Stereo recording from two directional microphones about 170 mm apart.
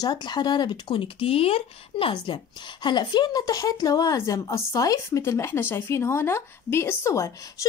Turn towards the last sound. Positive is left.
turn(degrees=15)  # may be behind; listen again after turning